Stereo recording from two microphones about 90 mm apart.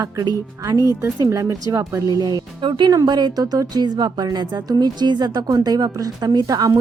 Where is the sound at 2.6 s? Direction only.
65° right (ahead or behind).